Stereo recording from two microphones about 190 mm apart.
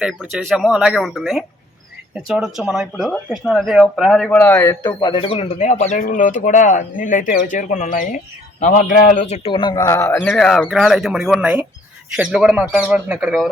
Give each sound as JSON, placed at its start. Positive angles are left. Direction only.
{"t": 0.0, "sound": "a man's voice", "side_deg": -5}